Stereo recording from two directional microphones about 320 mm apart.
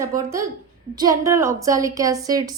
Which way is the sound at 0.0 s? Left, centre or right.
Centre.